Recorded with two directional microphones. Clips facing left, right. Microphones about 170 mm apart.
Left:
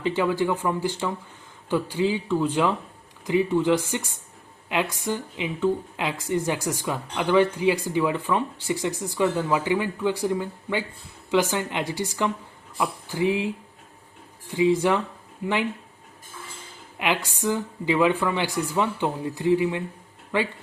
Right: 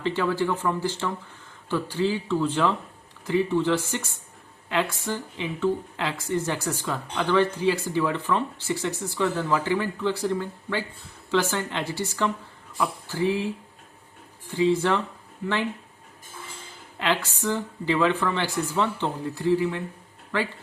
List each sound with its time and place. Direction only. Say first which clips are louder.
0.0 s speech: left 2 dB; 15° left (ahead or behind)
14.5 s speech: left 1 dB; 15° left (ahead or behind)
17.0 s speech: even; 15° left (ahead or behind)